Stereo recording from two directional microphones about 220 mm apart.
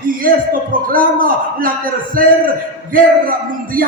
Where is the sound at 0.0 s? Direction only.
40° right (ahead or behind).